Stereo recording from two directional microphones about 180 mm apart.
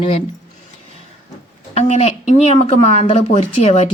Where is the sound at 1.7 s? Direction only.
35° left (ahead or behind).